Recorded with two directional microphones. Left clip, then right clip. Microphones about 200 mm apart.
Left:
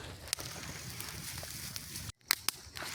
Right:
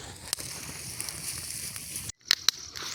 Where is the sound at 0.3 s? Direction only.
15° right (ahead or behind).